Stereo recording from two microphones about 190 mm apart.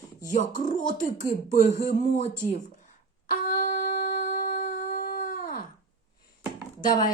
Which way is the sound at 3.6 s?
45° left (ahead or behind).